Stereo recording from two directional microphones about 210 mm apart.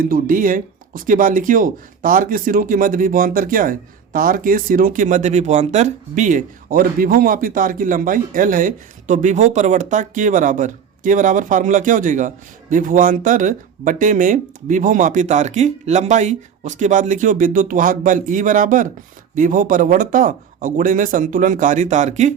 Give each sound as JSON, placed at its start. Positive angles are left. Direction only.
{"t": 0.0, "sound": "speech", "side_deg": -40}